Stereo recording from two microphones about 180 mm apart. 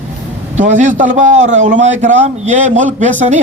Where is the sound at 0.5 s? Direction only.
45° right (ahead or behind).